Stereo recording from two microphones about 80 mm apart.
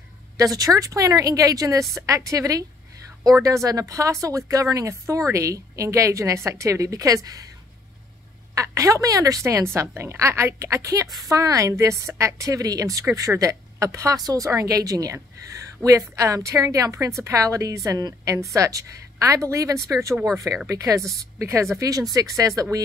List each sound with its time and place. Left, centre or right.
0.4 s speech: right
8.5 s a woman's voice: right
15.8 s speech: right
16.2 s a woman's voice: right